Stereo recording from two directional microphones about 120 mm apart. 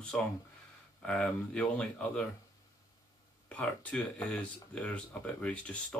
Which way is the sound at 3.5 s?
10° left (ahead or behind).